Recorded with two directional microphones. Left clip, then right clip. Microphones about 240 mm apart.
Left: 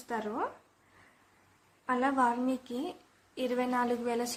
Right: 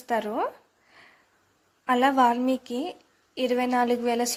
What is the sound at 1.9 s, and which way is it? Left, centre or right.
A woman's voice, right.